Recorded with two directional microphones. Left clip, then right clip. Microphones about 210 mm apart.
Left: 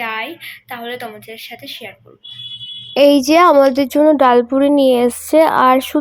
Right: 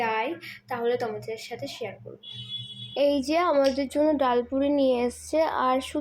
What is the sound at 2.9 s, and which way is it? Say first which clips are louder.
A woman's voice: left 13 dB; 45° left (ahead or behind).